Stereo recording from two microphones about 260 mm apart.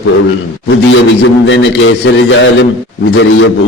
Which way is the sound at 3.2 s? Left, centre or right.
Left.